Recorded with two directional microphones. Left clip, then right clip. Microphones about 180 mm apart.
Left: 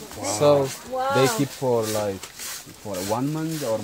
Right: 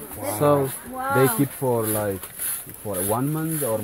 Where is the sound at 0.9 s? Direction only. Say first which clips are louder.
Even; 50° left (ahead or behind).